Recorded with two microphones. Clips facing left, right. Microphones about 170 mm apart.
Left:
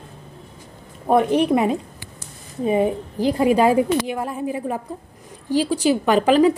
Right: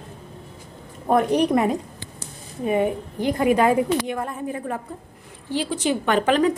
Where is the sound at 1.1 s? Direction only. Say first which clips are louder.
Left 2 dB; 25° left (ahead or behind).